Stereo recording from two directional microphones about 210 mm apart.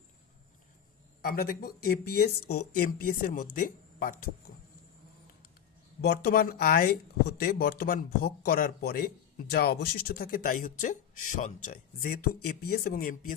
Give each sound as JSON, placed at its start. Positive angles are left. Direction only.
{"t": 1.2, "sound": "speech", "side_deg": 45}
{"t": 6.0, "sound": "speech", "side_deg": 50}